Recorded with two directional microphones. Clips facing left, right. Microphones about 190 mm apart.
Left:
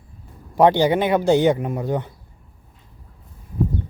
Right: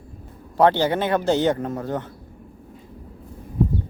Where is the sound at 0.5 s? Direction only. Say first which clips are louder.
Left 3 dB; 15° left (ahead or behind).